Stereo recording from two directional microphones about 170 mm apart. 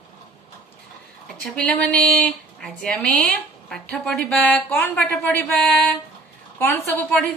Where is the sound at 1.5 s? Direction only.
5° left (ahead or behind).